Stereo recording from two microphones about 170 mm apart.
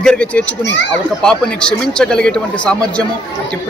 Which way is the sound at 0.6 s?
90° left.